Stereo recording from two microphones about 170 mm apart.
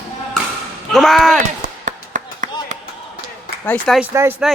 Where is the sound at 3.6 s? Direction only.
10° left (ahead or behind).